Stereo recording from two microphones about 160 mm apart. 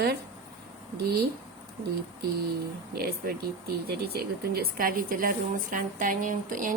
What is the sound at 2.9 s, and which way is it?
Speech, 70° right (ahead or behind).